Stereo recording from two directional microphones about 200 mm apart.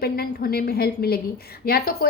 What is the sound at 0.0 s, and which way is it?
A woman's voice, 50° left (ahead or behind).